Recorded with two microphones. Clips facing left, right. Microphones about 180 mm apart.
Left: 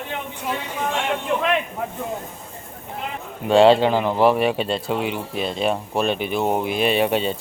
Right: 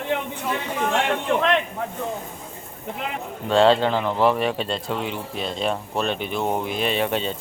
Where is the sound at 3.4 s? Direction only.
10° left (ahead or behind).